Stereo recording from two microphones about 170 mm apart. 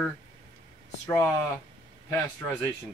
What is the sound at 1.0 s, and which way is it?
Speech, 15° left (ahead or behind).